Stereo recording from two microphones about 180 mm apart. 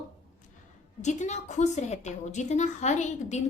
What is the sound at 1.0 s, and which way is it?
A woman's voice, 40° left (ahead or behind).